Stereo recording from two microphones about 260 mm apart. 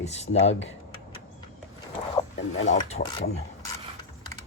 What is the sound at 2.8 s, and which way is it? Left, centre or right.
Speech, left.